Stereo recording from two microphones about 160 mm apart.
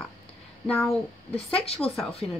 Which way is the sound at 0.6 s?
10° left (ahead or behind).